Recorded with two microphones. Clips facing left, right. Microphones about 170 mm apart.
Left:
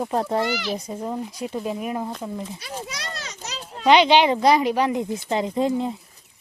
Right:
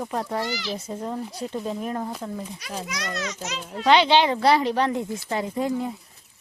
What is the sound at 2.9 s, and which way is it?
Speech, 30° left (ahead or behind).